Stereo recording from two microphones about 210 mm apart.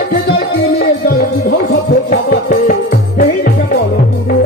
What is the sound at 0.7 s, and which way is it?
Music, 45° left (ahead or behind).